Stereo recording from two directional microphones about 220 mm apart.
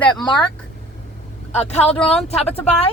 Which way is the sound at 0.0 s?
20° left (ahead or behind).